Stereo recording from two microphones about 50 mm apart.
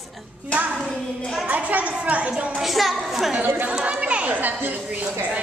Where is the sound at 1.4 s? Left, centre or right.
Right.